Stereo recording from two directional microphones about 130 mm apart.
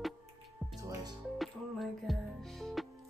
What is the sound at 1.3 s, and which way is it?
Music, centre (ahead or behind).